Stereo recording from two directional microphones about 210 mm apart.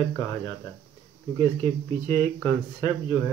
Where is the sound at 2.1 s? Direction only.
10° left (ahead or behind).